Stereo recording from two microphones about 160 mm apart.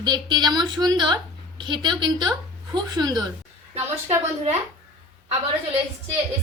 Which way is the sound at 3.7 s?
45° right (ahead or behind).